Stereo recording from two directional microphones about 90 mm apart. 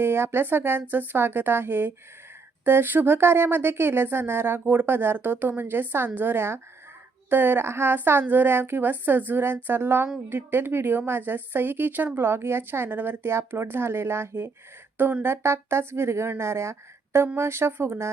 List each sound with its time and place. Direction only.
0.0 s a woman's voice: 25° right (ahead or behind)